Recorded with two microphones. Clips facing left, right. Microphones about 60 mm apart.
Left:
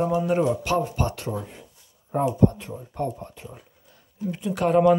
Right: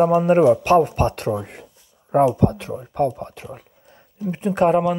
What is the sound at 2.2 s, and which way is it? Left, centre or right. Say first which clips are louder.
Speech: right 3 dB; right.